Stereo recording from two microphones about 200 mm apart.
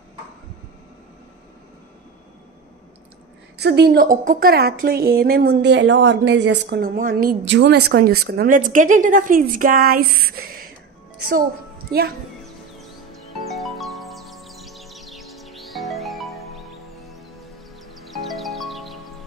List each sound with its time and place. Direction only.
3.5 s a woman's voice: 55° right (ahead or behind)
7.0 s a woman's voice: 45° right (ahead or behind)
13.5 s music: centre (ahead or behind)
18.0 s music: centre (ahead or behind)